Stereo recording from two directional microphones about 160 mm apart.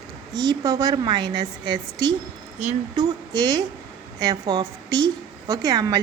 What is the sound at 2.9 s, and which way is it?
A woman's voice, 25° right (ahead or behind).